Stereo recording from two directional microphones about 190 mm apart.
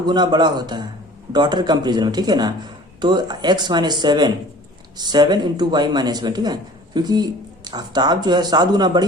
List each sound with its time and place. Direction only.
0.0 s speech: 25° right (ahead or behind)